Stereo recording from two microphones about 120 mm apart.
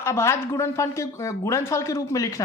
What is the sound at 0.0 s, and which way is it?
Speech, 25° left (ahead or behind).